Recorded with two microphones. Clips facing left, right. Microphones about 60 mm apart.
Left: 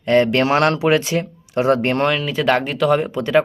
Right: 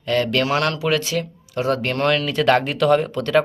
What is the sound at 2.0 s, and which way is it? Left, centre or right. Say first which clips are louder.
Speech: even; centre.